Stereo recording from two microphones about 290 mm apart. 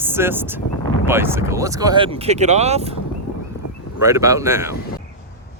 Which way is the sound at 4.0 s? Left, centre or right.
Centre.